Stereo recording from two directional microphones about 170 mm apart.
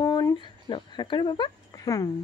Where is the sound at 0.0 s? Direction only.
20° left (ahead or behind).